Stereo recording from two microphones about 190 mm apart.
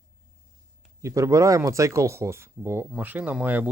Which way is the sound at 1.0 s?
15° right (ahead or behind).